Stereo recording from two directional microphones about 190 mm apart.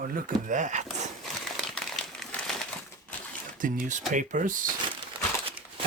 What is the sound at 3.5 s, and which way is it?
Speech, 45° right (ahead or behind).